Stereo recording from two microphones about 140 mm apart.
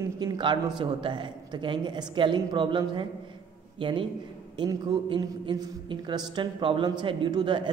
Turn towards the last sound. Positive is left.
turn(degrees=-35)  # may be behind; listen again after turning